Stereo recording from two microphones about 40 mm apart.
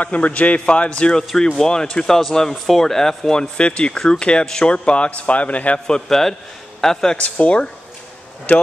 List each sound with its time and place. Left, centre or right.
0.0 s a man's voice: left
6.0 s speech: centre
7.2 s speech: left